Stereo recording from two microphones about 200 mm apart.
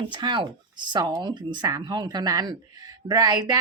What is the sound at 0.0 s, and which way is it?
Speech, 25° right (ahead or behind).